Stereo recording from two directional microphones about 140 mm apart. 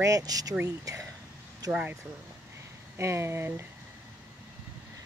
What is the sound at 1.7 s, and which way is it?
Speech, 10° right (ahead or behind).